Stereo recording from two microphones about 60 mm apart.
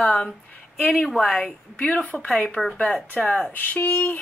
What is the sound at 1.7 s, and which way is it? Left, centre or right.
A woman's voice, centre.